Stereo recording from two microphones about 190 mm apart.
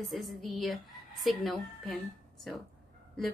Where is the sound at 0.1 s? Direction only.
Centre (ahead or behind).